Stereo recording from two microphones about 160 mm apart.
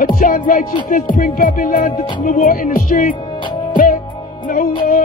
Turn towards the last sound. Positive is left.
turn(degrees=60)  # may be behind; listen again after turning